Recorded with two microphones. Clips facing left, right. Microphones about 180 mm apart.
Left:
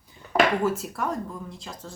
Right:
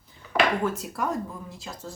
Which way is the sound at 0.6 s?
5° left (ahead or behind).